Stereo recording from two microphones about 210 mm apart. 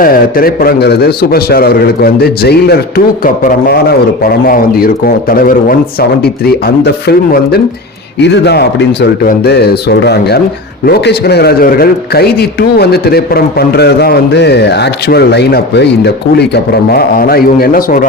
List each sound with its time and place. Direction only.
0.0 s a man's voice: 45° left (ahead or behind)